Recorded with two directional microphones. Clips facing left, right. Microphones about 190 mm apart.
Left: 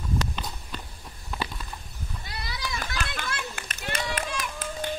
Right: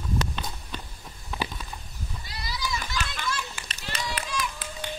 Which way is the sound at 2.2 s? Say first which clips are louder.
Right 1 dB; 55° left (ahead or behind).